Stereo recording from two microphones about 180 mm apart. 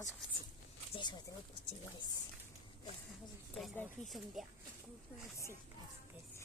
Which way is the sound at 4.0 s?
Centre (ahead or behind).